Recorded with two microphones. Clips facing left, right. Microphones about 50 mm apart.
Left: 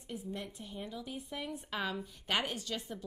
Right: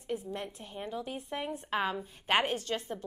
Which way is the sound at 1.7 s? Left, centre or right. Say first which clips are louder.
Right 6 dB; right.